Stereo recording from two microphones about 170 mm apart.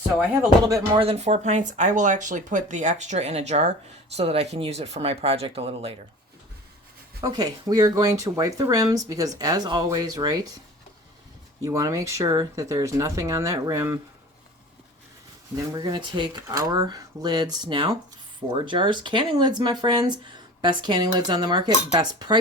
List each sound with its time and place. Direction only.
0.7 s speech: 30° right (ahead or behind)
7.2 s speech: 20° right (ahead or behind)
11.6 s speech: 20° right (ahead or behind)
15.5 s speech: 25° right (ahead or behind)